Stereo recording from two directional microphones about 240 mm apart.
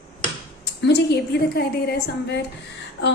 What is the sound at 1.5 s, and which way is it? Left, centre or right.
Speech, left.